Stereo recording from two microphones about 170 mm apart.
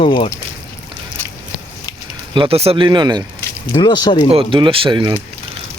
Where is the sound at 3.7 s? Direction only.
25° left (ahead or behind).